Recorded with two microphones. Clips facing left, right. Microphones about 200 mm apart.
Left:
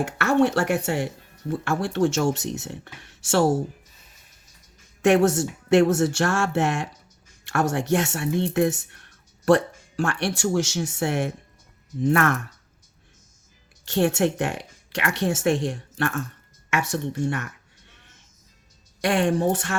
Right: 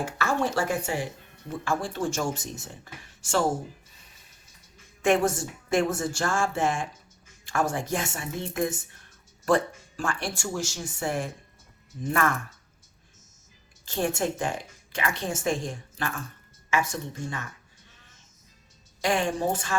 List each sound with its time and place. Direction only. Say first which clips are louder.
0.0 s speech: left 7 dB; 70° left (ahead or behind)
5.0 s speech: left 5 dB; 70° left (ahead or behind)
13.8 s speech: left 6 dB; 70° left (ahead or behind)
19.1 s speech: left 6 dB; 65° left (ahead or behind)